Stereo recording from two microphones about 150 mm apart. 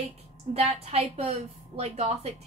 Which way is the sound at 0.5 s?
45° right (ahead or behind).